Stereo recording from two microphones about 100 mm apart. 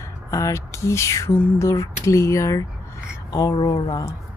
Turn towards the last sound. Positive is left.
turn(degrees=45)  # may be behind; listen again after turning